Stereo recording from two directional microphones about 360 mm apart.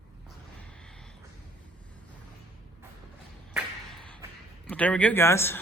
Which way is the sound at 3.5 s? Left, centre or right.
Centre.